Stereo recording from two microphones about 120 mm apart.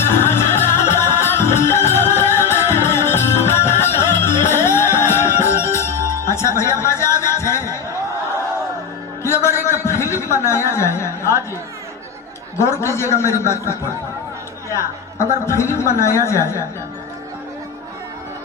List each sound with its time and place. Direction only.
0.0 s music: 20° left (ahead or behind)
9.2 s a sound: 20° left (ahead or behind)
12.5 s speech: 20° left (ahead or behind)
15.4 s speech: 25° left (ahead or behind)